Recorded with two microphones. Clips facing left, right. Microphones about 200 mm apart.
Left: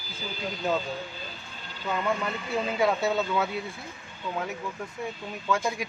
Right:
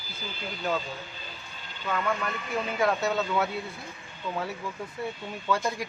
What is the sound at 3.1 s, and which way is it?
Speech, 5° left (ahead or behind).